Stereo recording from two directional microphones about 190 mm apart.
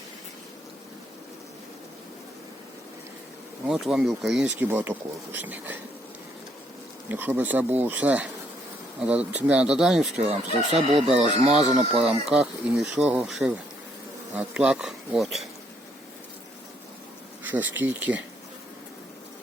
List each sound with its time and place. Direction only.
3.7 s speech: centre (ahead or behind)
7.1 s speech: 10° right (ahead or behind)
10.2 s speech: 35° right (ahead or behind)
11.9 s speech: 5° right (ahead or behind)
17.4 s insect: 10° right (ahead or behind)
17.7 s speech: 10° right (ahead or behind)